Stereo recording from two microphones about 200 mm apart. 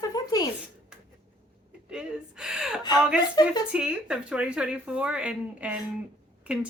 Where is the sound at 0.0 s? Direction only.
20° left (ahead or behind).